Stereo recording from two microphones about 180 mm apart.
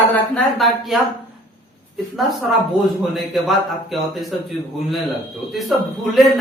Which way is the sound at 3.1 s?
Centre (ahead or behind).